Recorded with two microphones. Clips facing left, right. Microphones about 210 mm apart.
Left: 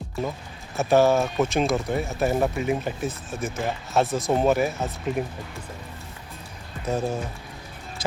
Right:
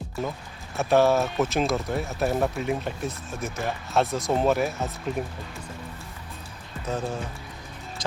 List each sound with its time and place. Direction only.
0.8 s speech: centre (ahead or behind)
6.8 s speech: 10° left (ahead or behind)